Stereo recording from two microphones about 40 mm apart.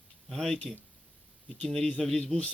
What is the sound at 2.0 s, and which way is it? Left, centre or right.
Speech, centre.